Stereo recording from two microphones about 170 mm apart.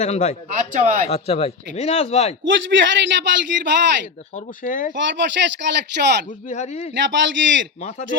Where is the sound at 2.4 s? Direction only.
90° right.